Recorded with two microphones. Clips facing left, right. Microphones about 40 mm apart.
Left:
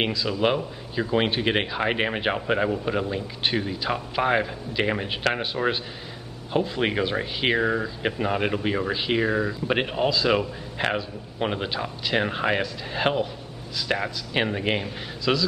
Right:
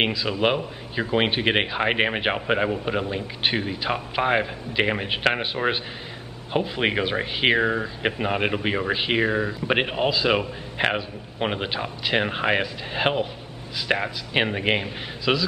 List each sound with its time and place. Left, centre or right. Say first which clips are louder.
0.0 s speech: right 1 dB; right